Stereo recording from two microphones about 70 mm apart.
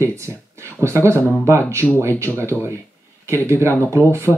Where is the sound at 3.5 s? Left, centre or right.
Right.